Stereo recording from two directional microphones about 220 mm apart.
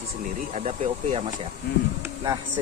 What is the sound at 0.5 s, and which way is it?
Speech, 35° right (ahead or behind).